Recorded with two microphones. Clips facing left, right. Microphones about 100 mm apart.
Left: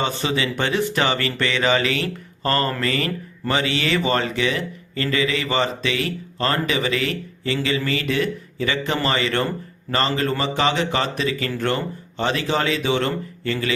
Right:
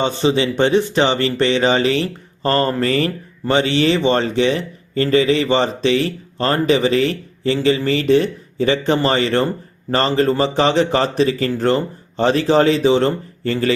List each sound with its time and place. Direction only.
0.0 s a man's voice: 25° right (ahead or behind)